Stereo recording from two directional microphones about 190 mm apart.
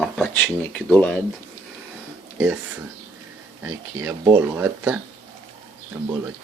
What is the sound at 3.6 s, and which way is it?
Speech, 15° right (ahead or behind).